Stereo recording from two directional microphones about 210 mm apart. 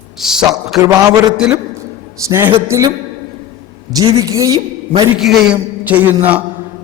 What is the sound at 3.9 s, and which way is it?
Speech, 15° right (ahead or behind).